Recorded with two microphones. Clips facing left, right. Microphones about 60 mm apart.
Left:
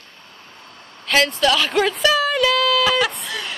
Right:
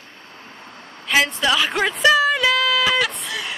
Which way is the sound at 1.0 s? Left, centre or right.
Centre.